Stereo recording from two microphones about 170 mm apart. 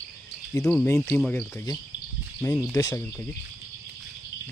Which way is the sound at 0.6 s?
5° left (ahead or behind).